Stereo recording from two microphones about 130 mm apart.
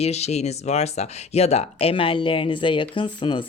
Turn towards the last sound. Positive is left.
turn(degrees=40)  # may be behind; listen again after turning